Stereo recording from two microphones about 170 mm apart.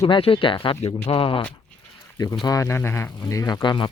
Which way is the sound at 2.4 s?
20° left (ahead or behind).